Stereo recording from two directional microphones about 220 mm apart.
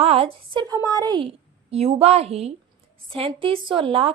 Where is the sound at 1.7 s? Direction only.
30° right (ahead or behind).